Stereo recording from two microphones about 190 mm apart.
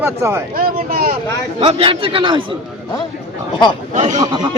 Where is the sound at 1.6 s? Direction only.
30° right (ahead or behind).